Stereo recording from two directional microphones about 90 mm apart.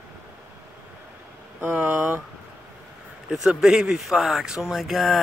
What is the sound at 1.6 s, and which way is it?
Speech, 25° right (ahead or behind).